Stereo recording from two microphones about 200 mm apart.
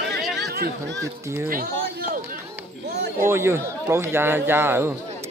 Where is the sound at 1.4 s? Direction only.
50° right (ahead or behind).